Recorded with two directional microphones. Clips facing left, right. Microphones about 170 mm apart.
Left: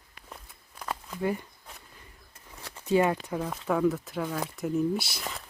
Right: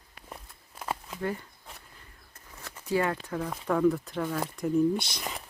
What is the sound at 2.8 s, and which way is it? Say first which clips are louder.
Speech: left 4 dB; 20° left (ahead or behind).